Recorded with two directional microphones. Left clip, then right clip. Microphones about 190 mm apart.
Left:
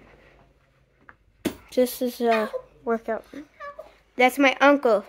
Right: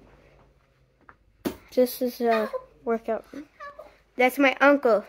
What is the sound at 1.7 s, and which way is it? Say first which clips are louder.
Speech: even; 5° left (ahead or behind).